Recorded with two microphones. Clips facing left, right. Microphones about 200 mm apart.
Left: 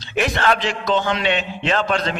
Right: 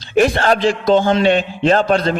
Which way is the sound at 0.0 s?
50° right (ahead or behind).